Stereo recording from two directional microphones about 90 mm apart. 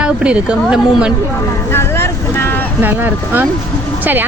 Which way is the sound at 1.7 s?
25° left (ahead or behind).